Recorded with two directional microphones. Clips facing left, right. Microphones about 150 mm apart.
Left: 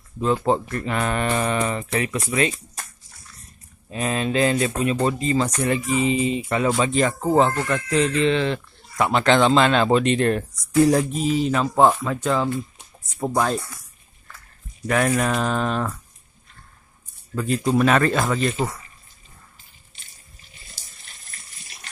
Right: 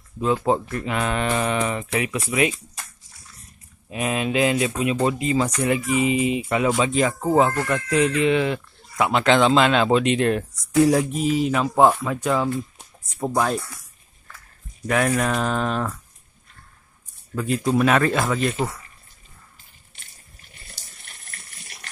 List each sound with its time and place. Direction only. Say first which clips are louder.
0.2 s speech: even; 5° right (ahead or behind)
3.9 s speech: even; 10° right (ahead or behind)
14.9 s speech: even; centre (ahead or behind)
17.4 s speech: left 1 dB; centre (ahead or behind)
20.7 s water: right 2 dB; 60° right (ahead or behind)